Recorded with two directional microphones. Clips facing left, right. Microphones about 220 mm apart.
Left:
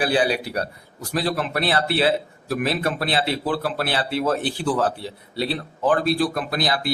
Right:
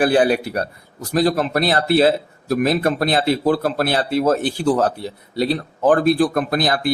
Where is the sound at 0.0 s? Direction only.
50° right (ahead or behind).